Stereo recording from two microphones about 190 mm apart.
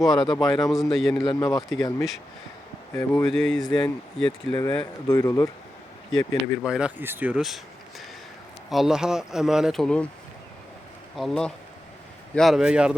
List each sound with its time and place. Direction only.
0.1 s speech: 20° left (ahead or behind)
0.5 s speech: centre (ahead or behind)
1.2 s speech: 20° left (ahead or behind)
2.9 s speech: 15° left (ahead or behind)
3.2 s speech: 5° left (ahead or behind)
5.0 s speech: 20° left (ahead or behind)
6.1 s speech: centre (ahead or behind)
11.2 s speech: 5° left (ahead or behind)